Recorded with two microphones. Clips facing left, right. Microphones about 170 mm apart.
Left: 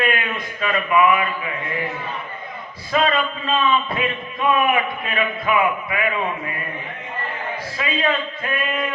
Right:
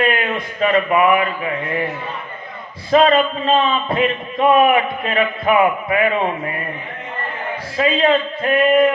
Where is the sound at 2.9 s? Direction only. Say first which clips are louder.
Right 7 dB; 30° right (ahead or behind).